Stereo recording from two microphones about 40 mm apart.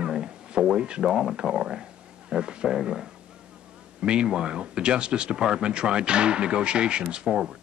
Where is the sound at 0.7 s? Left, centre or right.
Right.